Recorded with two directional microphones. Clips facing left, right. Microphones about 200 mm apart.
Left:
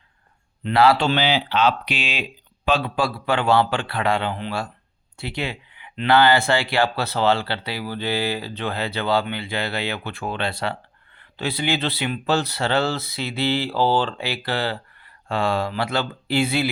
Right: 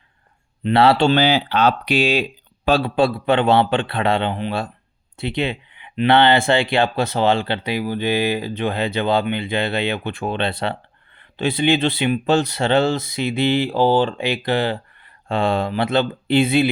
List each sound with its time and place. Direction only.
0.6 s speech: 25° right (ahead or behind)
1.1 s speech: 40° right (ahead or behind); by 16.6 s 20° right (ahead or behind)